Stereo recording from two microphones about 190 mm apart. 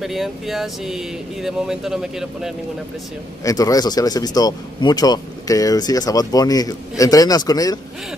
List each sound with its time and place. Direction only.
0.0 s speech: centre (ahead or behind)
3.4 s speech: 20° left (ahead or behind)